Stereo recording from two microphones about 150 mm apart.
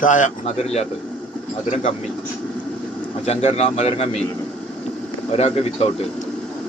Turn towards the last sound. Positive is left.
turn(degrees=45)  # may be behind; listen again after turning